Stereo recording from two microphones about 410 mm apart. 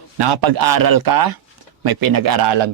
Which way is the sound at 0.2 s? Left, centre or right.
Right.